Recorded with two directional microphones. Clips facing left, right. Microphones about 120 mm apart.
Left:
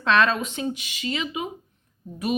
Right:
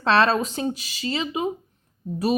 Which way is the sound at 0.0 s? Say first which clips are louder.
Right 2 dB; 35° right (ahead or behind).